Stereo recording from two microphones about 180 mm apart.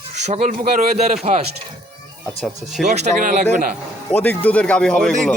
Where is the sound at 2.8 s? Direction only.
40° right (ahead or behind).